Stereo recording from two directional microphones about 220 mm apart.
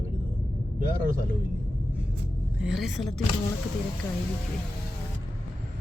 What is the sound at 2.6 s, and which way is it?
Speech, centre (ahead or behind).